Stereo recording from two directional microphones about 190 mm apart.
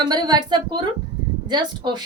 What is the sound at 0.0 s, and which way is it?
A woman's voice, 20° right (ahead or behind).